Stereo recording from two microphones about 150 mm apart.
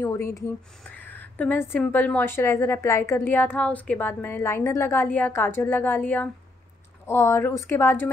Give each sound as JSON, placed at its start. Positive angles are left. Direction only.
{"t": 0.0, "sound": "a woman's voice", "side_deg": 20}